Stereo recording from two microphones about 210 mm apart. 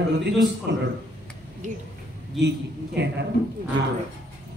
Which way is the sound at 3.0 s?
55° right (ahead or behind).